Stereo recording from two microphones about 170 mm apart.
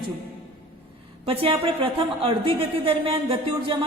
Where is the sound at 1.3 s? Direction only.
30° right (ahead or behind).